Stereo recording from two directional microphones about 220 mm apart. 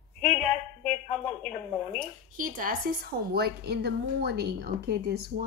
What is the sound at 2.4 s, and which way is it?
A woman's voice, 40° right (ahead or behind).